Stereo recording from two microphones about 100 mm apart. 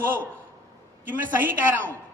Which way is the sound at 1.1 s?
20° right (ahead or behind).